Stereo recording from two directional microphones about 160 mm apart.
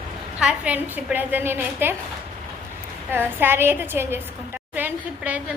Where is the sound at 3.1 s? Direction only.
15° right (ahead or behind).